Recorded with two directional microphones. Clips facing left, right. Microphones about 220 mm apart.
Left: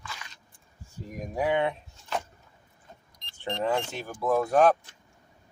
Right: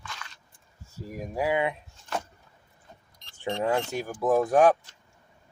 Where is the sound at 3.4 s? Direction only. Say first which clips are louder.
Right 2 dB; 5° right (ahead or behind).